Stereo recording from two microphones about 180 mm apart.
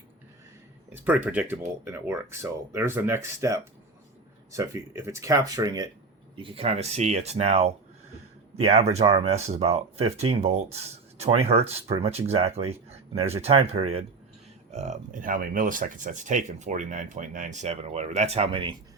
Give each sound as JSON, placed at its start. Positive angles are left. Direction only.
{"t": 0.9, "sound": "speech", "side_deg": -10}